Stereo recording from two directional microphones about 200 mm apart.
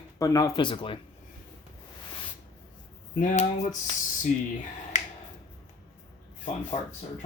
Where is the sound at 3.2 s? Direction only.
40° left (ahead or behind).